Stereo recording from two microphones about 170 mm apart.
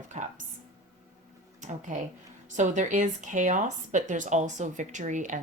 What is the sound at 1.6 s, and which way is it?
Speech, 45° right (ahead or behind).